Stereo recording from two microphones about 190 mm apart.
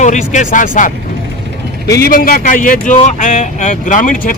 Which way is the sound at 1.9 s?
50° left (ahead or behind).